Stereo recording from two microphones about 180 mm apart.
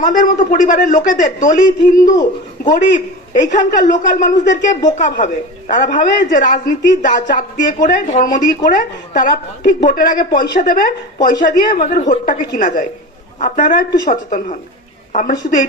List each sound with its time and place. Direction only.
0.0 s a woman's voice: 45° left (ahead or behind)